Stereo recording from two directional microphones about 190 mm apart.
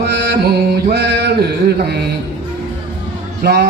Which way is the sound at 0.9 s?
60° right (ahead or behind).